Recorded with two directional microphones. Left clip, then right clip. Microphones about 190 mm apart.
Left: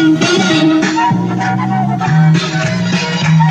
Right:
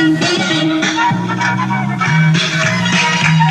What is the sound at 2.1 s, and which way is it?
Music, 40° left (ahead or behind).